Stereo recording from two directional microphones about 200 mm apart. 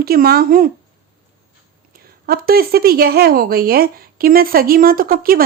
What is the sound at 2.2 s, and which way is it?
A woman's voice, 50° right (ahead or behind).